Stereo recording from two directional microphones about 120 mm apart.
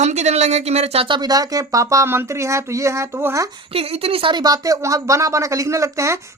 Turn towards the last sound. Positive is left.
turn(degrees=-25)  # may be behind; listen again after turning